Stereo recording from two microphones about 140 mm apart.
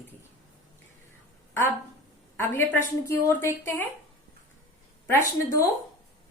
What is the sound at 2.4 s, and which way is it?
A woman's voice, 15° left (ahead or behind).